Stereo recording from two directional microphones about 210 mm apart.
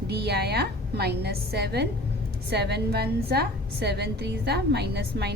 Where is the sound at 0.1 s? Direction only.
50° right (ahead or behind).